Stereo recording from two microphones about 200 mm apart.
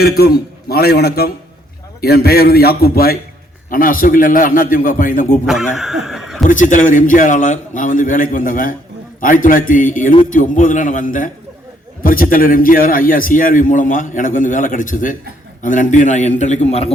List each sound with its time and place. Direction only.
0.0 s a man's voice: 50° left (ahead or behind)
5.5 s a sound: centre (ahead or behind)
6.4 s a man's voice: 40° left (ahead or behind)